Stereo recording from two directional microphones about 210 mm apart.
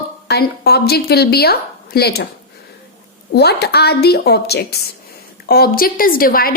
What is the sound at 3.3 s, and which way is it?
A woman's voice, 50° left (ahead or behind).